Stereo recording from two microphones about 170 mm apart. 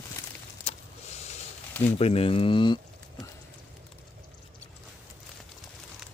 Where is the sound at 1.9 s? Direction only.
35° left (ahead or behind).